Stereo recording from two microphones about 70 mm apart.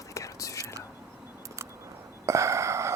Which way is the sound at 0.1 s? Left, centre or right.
Left.